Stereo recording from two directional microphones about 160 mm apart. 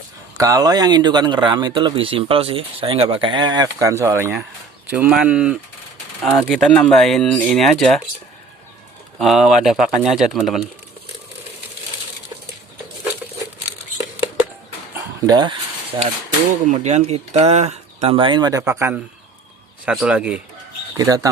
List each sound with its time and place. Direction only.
0.3 s speech: 20° right (ahead or behind); by 7.9 s 5° left (ahead or behind)
9.1 s speech: centre (ahead or behind)
14.9 s a sound: 25° right (ahead or behind)
16.5 s speech: 50° right (ahead or behind); by 20.4 s 5° right (ahead or behind)
20.9 s speech: 20° right (ahead or behind)